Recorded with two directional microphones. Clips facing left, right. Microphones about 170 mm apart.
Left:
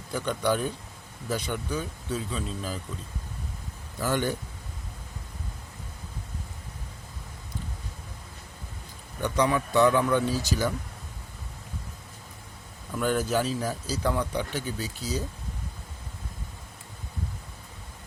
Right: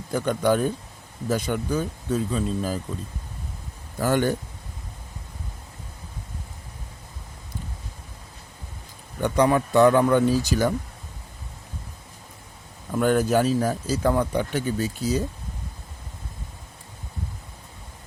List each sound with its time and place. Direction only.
0.1 s speech: 50° right (ahead or behind)
4.0 s speech: 50° right (ahead or behind)
9.2 s speech: 50° right (ahead or behind)
12.9 s speech: 50° right (ahead or behind)